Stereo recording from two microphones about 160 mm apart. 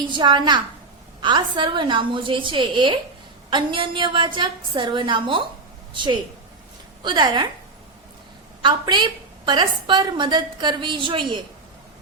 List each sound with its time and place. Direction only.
0.1 s a woman's voice: 30° right (ahead or behind)
8.6 s a woman's voice: 30° right (ahead or behind)